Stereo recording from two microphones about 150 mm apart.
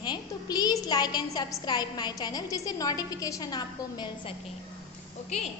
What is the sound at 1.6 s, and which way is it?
A woman's voice, 30° left (ahead or behind).